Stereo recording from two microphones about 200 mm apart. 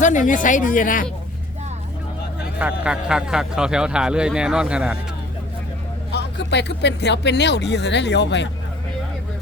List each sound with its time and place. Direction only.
0.0 s speech: 40° left (ahead or behind)
2.6 s a man's voice: 5° right (ahead or behind)
6.1 s speech: 60° left (ahead or behind)